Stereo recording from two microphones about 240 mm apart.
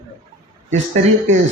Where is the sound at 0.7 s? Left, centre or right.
Right.